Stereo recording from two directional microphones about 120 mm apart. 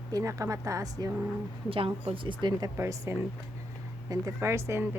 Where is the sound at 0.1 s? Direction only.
25° right (ahead or behind).